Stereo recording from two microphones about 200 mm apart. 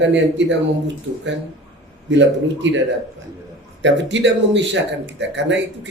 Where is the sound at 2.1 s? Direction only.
65° right (ahead or behind).